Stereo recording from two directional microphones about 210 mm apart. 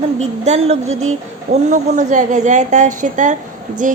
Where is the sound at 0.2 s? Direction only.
30° right (ahead or behind).